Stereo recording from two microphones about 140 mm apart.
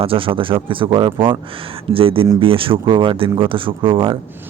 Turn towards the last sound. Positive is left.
turn(degrees=-40)  # may be behind; listen again after turning